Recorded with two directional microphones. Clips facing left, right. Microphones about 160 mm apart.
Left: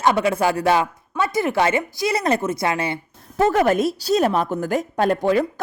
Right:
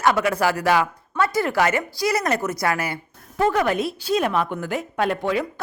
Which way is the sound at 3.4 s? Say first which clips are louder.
Left 3 dB; 40° left (ahead or behind).